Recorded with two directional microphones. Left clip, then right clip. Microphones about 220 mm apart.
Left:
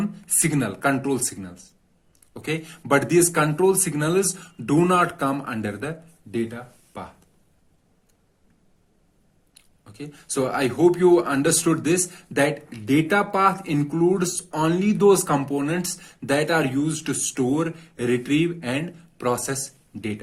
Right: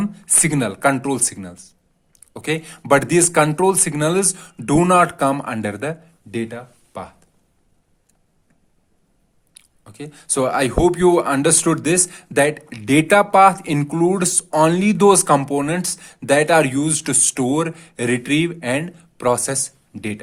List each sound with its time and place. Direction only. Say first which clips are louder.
0.0 s speech: right 5 dB; 35° right (ahead or behind)
9.6 s speech: right 4 dB; 40° right (ahead or behind)